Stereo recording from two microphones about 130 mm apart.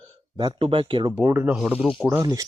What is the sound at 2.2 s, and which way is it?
Speech, 25° right (ahead or behind).